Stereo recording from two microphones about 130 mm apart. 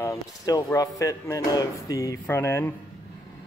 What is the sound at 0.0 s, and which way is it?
Speech, 25° left (ahead or behind).